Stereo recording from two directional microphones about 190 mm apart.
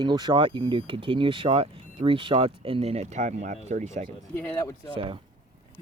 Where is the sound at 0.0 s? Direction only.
20° right (ahead or behind); by 4.0 s 40° right (ahead or behind).